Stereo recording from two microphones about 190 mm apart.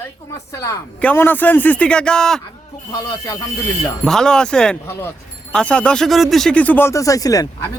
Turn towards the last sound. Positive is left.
turn(degrees=20)  # may be behind; listen again after turning